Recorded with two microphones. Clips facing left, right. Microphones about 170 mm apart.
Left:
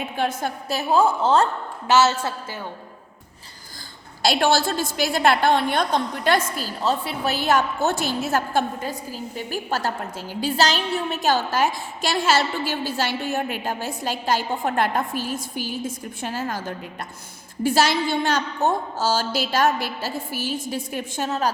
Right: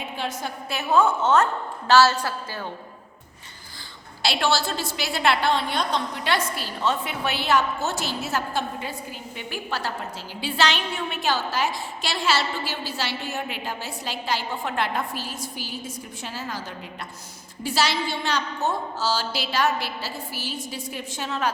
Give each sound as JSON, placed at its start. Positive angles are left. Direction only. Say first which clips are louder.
{"t": 0.2, "sound": "a woman's voice", "louder": "left 7 dB", "side_deg": 50}
{"t": 0.8, "sound": "a woman's voice", "louder": "left 1 dB", "side_deg": 35}
{"t": 1.9, "sound": "a woman's voice", "louder": "even", "side_deg": 20}
{"t": 4.2, "sound": "a woman's voice", "louder": "left 4 dB", "side_deg": 45}